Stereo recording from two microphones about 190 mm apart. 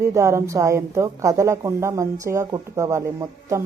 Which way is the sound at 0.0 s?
15° right (ahead or behind).